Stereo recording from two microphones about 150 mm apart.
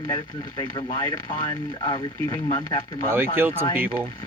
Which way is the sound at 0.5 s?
25° left (ahead or behind).